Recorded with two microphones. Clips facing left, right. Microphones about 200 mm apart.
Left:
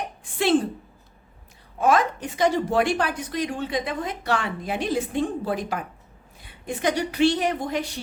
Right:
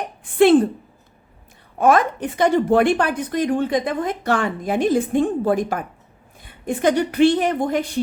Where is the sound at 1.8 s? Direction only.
55° right (ahead or behind).